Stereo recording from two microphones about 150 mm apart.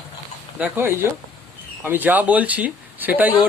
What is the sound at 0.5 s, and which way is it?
Speech, 10° right (ahead or behind).